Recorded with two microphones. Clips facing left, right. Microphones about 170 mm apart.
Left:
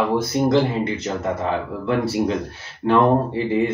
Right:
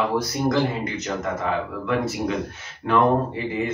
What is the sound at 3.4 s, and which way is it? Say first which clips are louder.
Speech: left 5 dB; 30° left (ahead or behind).